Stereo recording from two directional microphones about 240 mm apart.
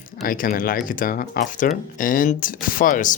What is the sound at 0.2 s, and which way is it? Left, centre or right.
Speech, left.